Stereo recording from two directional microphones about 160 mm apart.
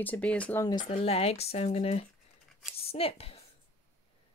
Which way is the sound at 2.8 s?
35° left (ahead or behind).